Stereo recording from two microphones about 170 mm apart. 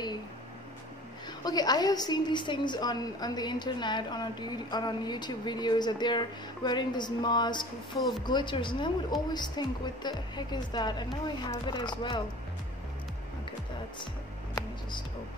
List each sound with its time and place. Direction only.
1.4 s a woman's voice: 25° left (ahead or behind)